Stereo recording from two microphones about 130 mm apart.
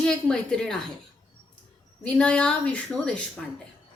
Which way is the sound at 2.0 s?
10° left (ahead or behind).